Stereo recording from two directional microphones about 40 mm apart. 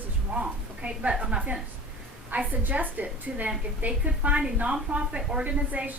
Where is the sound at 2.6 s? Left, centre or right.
Right.